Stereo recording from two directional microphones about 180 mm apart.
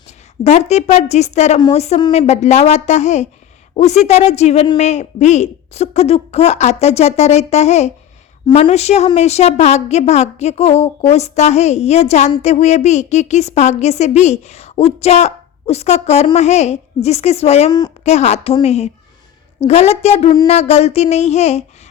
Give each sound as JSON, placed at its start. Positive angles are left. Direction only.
{"t": 0.4, "sound": "speech", "side_deg": 40}
{"t": 17.7, "sound": "a woman's voice", "side_deg": 20}
{"t": 18.0, "sound": "speech", "side_deg": 35}